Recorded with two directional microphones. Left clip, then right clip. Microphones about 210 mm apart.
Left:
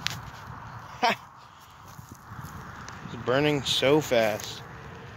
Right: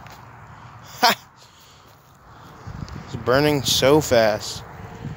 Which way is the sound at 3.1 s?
25° right (ahead or behind).